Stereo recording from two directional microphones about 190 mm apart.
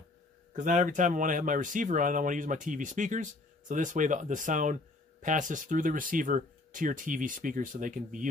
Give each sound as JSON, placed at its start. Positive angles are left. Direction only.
{"t": 0.5, "sound": "speech", "side_deg": -40}